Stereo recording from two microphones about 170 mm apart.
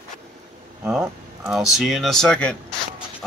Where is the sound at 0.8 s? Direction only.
5° right (ahead or behind).